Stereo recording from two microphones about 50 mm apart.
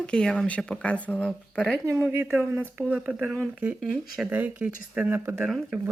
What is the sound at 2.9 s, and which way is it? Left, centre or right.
Speech, right.